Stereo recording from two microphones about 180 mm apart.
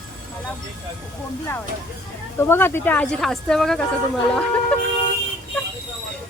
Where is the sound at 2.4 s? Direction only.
10° left (ahead or behind).